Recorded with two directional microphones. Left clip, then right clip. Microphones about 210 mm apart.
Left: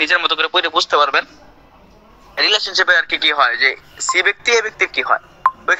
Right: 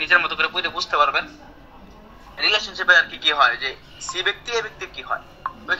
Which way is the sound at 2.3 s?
50° left (ahead or behind).